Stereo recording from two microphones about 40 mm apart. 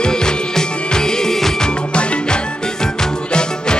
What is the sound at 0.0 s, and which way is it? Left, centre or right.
Music, centre.